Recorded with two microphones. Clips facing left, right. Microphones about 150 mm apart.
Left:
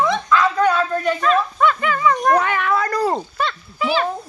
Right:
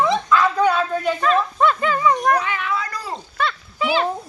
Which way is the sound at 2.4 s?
55° left (ahead or behind).